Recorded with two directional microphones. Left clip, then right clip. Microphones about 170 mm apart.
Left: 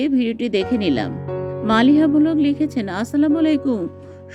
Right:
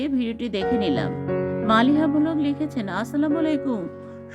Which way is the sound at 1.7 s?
20° left (ahead or behind).